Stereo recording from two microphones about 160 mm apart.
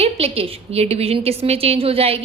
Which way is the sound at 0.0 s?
40° right (ahead or behind).